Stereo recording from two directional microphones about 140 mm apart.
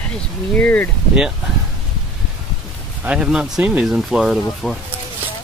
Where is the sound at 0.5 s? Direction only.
10° left (ahead or behind).